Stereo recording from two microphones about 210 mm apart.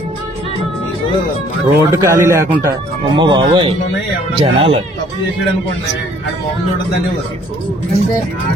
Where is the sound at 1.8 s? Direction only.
15° right (ahead or behind).